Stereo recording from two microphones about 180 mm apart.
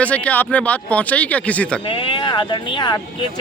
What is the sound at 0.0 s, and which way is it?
Speech, 10° left (ahead or behind).